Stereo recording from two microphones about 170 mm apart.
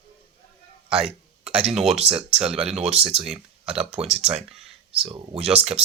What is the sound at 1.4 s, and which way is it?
Speech, 40° right (ahead or behind).